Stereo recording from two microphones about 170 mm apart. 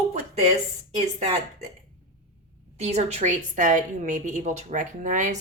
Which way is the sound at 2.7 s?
40° right (ahead or behind).